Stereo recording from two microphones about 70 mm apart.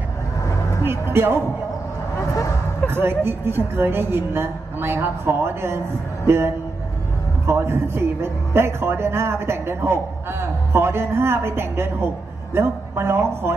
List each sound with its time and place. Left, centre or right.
0.8 s speech: right
2.1 s a sound: left
2.9 s a woman's voice: right